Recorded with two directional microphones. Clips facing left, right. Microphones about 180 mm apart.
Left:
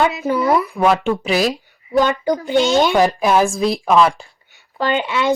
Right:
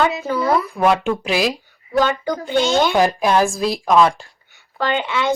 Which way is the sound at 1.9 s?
15° left (ahead or behind).